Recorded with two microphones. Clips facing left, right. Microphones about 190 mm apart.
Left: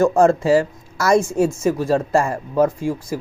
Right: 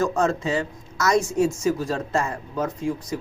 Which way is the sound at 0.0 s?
30° left (ahead or behind).